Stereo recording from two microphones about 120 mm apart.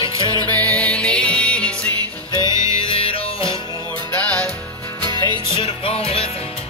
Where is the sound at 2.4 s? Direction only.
30° right (ahead or behind).